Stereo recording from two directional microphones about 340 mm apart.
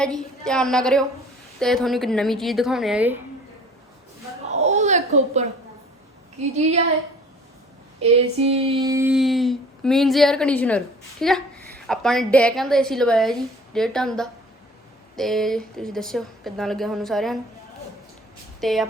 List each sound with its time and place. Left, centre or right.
0.0 s female singing: centre
4.5 s a sound: centre
8.0 s female singing: centre
18.6 s female singing: centre